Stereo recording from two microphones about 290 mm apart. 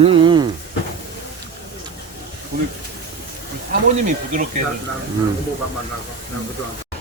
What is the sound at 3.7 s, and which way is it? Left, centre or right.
Speech, right.